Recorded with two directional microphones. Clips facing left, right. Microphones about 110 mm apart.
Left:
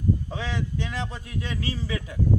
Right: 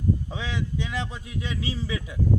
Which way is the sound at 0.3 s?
15° right (ahead or behind).